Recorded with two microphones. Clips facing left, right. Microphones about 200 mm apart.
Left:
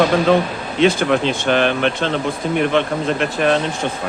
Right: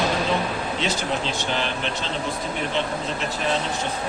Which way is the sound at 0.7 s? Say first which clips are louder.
Left 14 dB; 55° left (ahead or behind).